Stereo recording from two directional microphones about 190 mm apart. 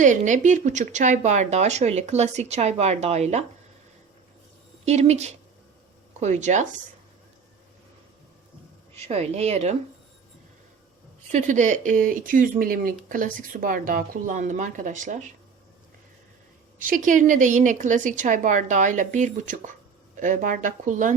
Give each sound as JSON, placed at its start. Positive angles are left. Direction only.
{"t": 0.0, "sound": "speech", "side_deg": -40}
{"t": 4.9, "sound": "speech", "side_deg": -35}
{"t": 9.0, "sound": "speech", "side_deg": -35}
{"t": 11.3, "sound": "speech", "side_deg": -40}
{"t": 16.7, "sound": "speech", "side_deg": -45}